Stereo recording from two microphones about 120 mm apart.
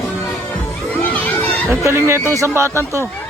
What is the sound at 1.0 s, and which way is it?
Crowd, 10° left (ahead or behind).